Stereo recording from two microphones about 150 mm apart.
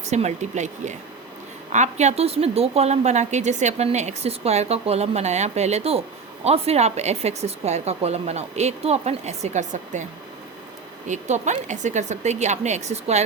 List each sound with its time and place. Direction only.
0.0 s speech: 50° right (ahead or behind)
11.1 s speech: 50° right (ahead or behind)